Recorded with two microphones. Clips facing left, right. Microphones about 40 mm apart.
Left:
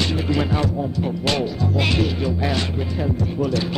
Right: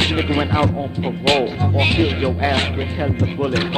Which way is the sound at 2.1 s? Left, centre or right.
Right.